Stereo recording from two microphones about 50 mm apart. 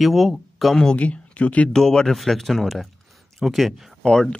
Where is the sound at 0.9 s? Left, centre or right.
Left.